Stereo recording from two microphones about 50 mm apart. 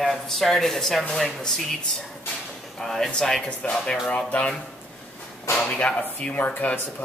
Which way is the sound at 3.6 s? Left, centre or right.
Left.